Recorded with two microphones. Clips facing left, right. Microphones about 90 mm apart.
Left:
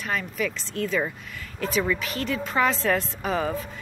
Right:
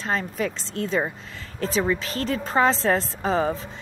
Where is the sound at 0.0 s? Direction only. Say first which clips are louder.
Right 2 dB; 30° right (ahead or behind).